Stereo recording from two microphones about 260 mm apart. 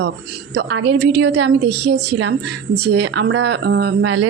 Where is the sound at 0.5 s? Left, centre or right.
Right.